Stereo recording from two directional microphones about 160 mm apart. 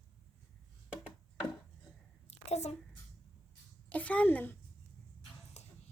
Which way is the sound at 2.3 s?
45° left (ahead or behind).